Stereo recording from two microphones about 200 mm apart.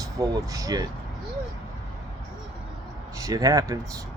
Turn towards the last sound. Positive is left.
turn(degrees=-15)  # may be behind; listen again after turning